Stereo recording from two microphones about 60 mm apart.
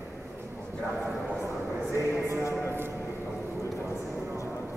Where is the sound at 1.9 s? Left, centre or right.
Right.